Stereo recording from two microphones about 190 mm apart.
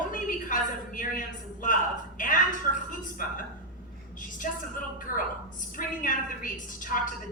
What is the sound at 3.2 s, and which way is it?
A woman's voice, 45° left (ahead or behind).